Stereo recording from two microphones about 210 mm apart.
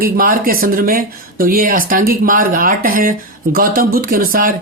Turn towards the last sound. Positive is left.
turn(degrees=-40)  # may be behind; listen again after turning